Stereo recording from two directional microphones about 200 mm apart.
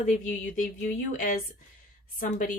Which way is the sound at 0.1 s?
40° left (ahead or behind).